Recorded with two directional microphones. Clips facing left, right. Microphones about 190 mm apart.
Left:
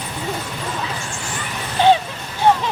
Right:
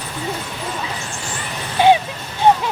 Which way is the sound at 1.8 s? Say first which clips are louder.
Right 1 dB; 10° right (ahead or behind).